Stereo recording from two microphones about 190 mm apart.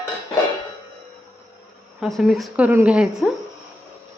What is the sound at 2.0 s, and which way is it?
A woman's voice, centre (ahead or behind).